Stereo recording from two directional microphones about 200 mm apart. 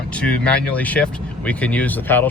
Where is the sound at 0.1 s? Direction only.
5° left (ahead or behind).